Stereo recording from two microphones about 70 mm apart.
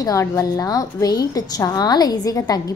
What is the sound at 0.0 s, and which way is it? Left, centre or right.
A woman's voice, left.